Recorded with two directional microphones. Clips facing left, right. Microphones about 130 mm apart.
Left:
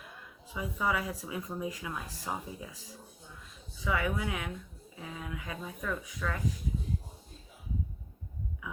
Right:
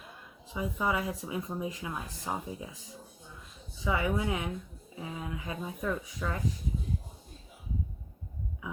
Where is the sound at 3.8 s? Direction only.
20° right (ahead or behind).